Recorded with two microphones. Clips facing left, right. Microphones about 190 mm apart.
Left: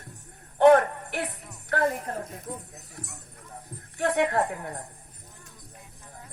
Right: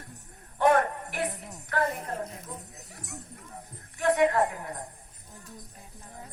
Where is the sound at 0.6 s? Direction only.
65° left (ahead or behind).